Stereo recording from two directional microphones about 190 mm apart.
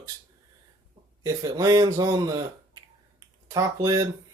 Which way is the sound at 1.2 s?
20° right (ahead or behind).